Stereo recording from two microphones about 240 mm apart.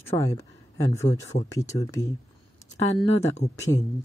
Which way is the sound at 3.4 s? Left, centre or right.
Left.